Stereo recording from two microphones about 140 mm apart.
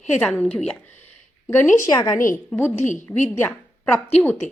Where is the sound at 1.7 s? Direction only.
30° left (ahead or behind).